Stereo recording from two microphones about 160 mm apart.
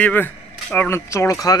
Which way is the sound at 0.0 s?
10° left (ahead or behind).